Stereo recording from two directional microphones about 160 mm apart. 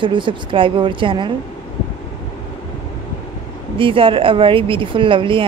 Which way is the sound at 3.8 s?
35° right (ahead or behind).